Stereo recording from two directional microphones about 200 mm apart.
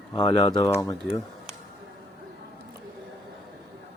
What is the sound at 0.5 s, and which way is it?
Speech, 20° left (ahead or behind).